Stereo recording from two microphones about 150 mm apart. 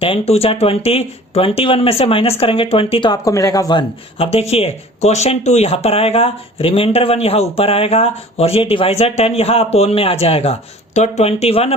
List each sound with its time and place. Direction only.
0.0 s speech: 40° left (ahead or behind)